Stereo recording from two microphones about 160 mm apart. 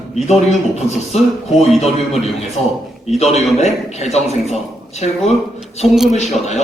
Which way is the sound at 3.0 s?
40° left (ahead or behind).